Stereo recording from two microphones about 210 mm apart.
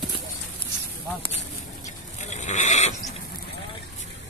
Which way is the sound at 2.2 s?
35° left (ahead or behind).